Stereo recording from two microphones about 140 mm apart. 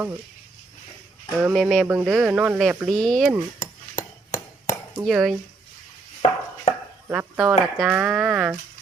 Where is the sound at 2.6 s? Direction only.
Centre (ahead or behind).